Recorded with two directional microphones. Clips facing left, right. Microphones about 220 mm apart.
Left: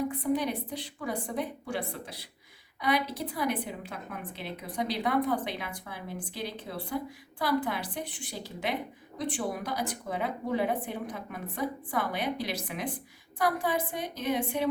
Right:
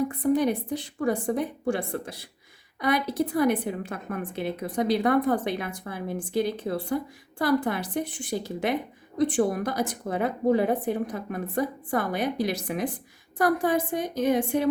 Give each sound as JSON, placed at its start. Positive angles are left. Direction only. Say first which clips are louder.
{"t": 0.2, "sound": "a woman's voice", "louder": "right 6 dB", "side_deg": -50}